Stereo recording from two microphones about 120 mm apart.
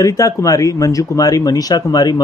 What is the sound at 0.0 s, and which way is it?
Speech, 30° left (ahead or behind).